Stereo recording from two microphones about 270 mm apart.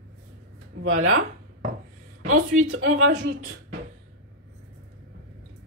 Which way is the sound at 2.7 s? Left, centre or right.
Right.